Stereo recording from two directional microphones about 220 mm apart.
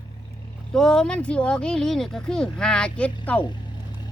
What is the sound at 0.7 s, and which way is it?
Speech, centre (ahead or behind).